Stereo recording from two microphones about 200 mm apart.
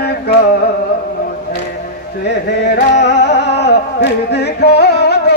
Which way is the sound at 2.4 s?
55° left (ahead or behind).